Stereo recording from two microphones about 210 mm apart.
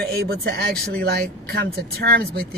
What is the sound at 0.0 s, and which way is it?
Speech, 50° right (ahead or behind).